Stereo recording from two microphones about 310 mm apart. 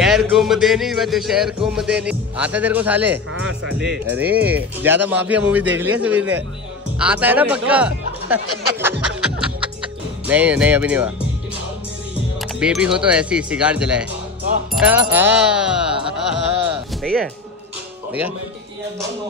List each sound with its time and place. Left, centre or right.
0.0 s speech: centre
3.3 s speech: right
4.1 s speech: centre
10.2 s speech: centre
12.4 s speech: centre